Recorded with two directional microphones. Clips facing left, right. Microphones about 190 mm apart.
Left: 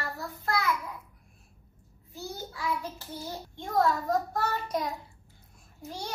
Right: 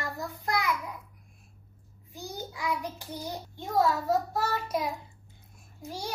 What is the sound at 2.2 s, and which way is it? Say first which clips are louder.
Child singing: even; 15° right (ahead or behind).